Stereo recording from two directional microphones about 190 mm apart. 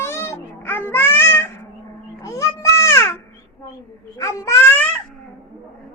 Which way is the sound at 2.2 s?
15° left (ahead or behind).